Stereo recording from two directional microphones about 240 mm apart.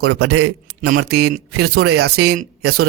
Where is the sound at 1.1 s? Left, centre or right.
Right.